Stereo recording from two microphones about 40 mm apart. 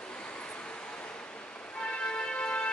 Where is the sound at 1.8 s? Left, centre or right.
Left.